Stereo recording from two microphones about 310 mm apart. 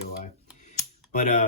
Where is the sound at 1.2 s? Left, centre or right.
Left.